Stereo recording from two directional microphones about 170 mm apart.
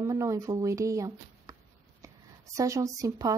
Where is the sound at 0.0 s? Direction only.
15° right (ahead or behind).